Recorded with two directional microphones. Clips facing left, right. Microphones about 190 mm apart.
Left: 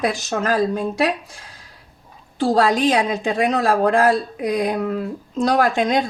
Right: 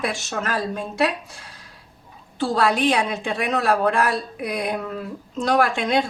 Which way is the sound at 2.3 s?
35° left (ahead or behind).